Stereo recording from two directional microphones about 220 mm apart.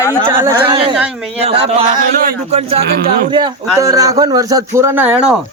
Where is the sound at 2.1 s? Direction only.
40° right (ahead or behind).